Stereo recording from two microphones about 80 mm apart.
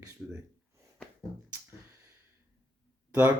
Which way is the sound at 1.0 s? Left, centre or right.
Centre.